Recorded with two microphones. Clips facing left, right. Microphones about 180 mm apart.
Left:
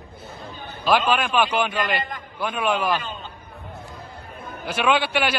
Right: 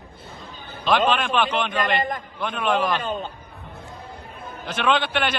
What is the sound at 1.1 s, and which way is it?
A man's voice, 10° left (ahead or behind).